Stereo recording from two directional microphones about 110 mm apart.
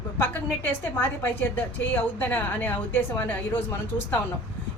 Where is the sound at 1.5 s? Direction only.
15° left (ahead or behind).